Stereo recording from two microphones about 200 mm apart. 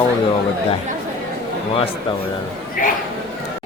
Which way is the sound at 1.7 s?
30° left (ahead or behind).